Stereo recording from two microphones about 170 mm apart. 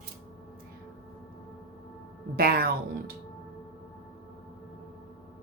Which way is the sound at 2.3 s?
65° right (ahead or behind).